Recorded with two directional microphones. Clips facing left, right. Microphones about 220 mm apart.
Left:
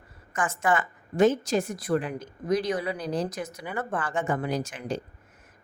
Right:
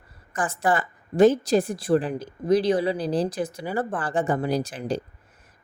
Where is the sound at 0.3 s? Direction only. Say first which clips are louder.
Right 2 dB; 35° right (ahead or behind).